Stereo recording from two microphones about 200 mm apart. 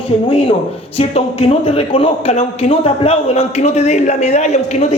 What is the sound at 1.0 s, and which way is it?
A man's voice, 30° left (ahead or behind).